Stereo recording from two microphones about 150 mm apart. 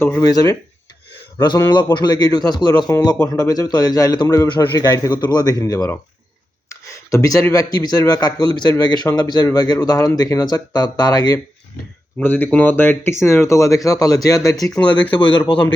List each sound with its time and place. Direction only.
0.0 s a man's voice: 20° left (ahead or behind)
7.1 s a man's voice: 20° left (ahead or behind)
12.2 s speech: 15° left (ahead or behind)
14.7 s speech: 5° left (ahead or behind)